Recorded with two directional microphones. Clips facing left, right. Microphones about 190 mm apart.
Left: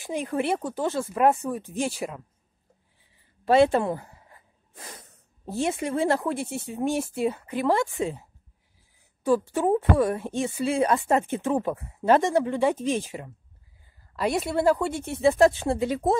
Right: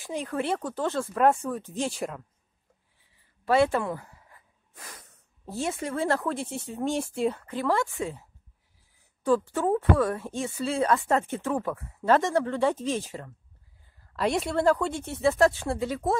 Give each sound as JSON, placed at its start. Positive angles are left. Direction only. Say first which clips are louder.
{"t": 0.0, "sound": "speech", "louder": "left 3 dB", "side_deg": 15}
{"t": 3.4, "sound": "speech", "louder": "left 4 dB", "side_deg": 25}
{"t": 14.1, "sound": "speech", "louder": "left 1 dB", "side_deg": 5}